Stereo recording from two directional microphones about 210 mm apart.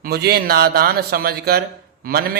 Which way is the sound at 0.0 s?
50° right (ahead or behind).